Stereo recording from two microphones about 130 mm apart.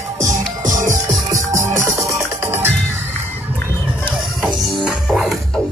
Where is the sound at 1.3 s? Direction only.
25° right (ahead or behind).